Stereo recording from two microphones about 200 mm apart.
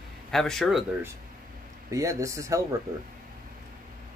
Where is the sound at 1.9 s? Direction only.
15° right (ahead or behind).